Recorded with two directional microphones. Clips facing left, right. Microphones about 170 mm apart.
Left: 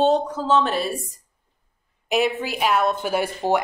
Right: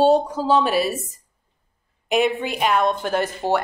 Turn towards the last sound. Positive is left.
turn(degrees=10)  # may be behind; listen again after turning